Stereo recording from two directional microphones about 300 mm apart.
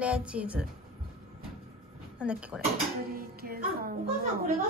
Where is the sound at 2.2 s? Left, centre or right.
Centre.